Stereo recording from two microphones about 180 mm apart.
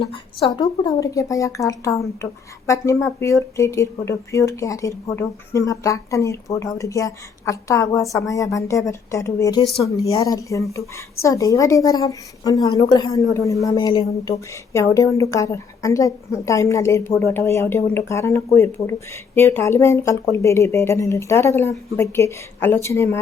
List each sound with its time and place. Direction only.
0.0 s speech: 30° left (ahead or behind); by 23.2 s 15° left (ahead or behind)